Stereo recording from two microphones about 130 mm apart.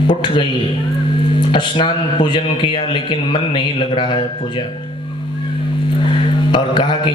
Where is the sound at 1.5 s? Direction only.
40° left (ahead or behind).